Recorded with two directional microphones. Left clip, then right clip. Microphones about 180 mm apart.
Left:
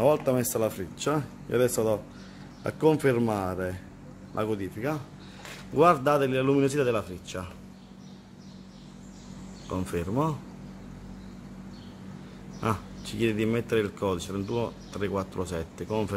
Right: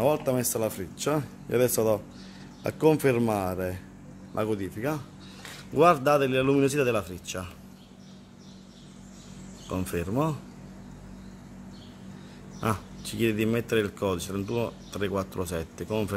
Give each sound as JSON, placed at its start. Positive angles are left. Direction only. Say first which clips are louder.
{"t": 0.0, "sound": "a man's voice", "louder": "left 2 dB", "side_deg": -5}
{"t": 5.8, "sound": "a man's voice", "louder": "right 1 dB", "side_deg": -15}
{"t": 9.7, "sound": "speech", "louder": "even", "side_deg": -20}
{"t": 12.5, "sound": "speech", "louder": "even", "side_deg": -15}